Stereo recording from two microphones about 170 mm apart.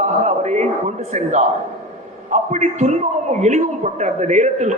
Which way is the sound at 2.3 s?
45° right (ahead or behind).